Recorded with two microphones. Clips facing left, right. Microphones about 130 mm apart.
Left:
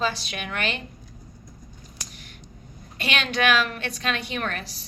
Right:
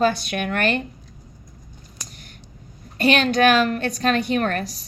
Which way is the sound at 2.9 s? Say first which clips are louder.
Right 9 dB; 40° right (ahead or behind).